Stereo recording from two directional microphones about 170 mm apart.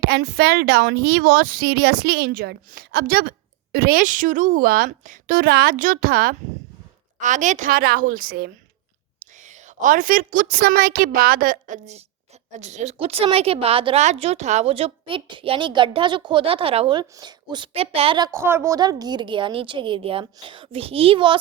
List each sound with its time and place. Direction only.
0.0 s speech: 70° right (ahead or behind)
7.2 s speech: 45° right (ahead or behind)
9.8 s a woman's voice: 50° right (ahead or behind); by 18.3 s 30° right (ahead or behind)
18.3 s a woman's voice: 15° right (ahead or behind); by 21.3 s 30° right (ahead or behind)